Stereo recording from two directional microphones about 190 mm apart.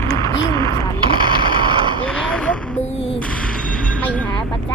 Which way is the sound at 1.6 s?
25° right (ahead or behind).